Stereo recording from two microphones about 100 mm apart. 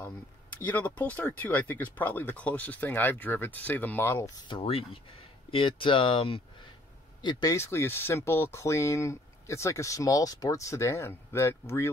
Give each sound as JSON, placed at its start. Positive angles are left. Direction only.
{"t": 0.7, "sound": "speech", "side_deg": 15}
{"t": 4.6, "sound": "speech", "side_deg": 70}
{"t": 5.5, "sound": "speech", "side_deg": 60}
{"t": 7.2, "sound": "speech", "side_deg": 50}
{"t": 7.5, "sound": "speech", "side_deg": 25}